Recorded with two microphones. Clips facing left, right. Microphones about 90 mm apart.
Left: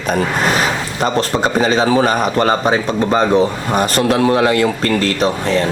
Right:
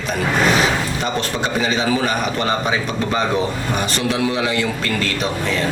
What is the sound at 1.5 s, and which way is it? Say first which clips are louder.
A man's voice: left 6 dB; 40° left (ahead or behind).